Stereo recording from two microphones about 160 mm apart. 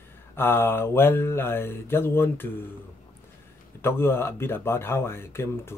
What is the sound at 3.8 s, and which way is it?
Speech, 15° left (ahead or behind).